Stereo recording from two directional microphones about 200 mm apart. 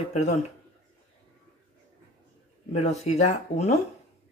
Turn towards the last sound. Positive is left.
turn(degrees=35)  # may be behind; listen again after turning